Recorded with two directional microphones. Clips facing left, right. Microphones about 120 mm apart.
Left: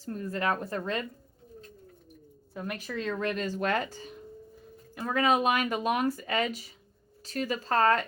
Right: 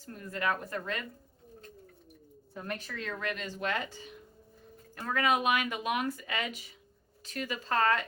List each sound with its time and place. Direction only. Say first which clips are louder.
0.0 s speech: left 3 dB; 30° left (ahead or behind)
2.6 s a woman's voice: left 2 dB; 10° left (ahead or behind)
2.9 s speech: left 9 dB; 25° left (ahead or behind); by 4.1 s 40° left (ahead or behind)
5.1 s speech: left 3 dB; 30° left (ahead or behind)